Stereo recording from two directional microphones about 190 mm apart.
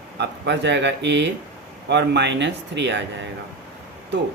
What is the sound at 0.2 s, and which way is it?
Speech, 65° right (ahead or behind).